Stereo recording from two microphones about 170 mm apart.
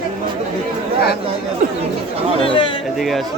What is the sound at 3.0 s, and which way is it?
Speech, centre (ahead or behind).